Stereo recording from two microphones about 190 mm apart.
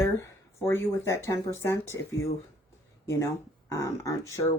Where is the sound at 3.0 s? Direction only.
15° left (ahead or behind).